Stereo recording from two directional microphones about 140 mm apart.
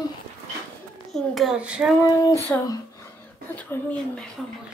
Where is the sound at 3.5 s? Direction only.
10° left (ahead or behind).